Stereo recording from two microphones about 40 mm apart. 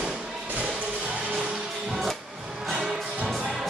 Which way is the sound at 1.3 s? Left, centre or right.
Centre.